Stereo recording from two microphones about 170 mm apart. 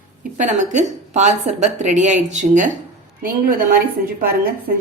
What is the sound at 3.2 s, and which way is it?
Speech, 60° right (ahead or behind).